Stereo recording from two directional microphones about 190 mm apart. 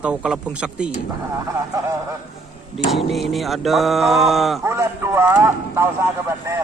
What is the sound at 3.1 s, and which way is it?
Speech, centre (ahead or behind).